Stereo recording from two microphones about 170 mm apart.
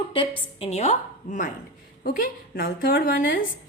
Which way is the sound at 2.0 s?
60° left (ahead or behind).